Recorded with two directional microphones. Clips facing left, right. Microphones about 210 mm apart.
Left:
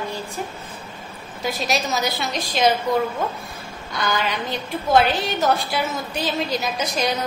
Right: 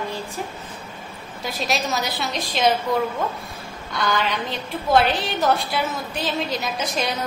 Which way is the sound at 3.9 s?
Centre (ahead or behind).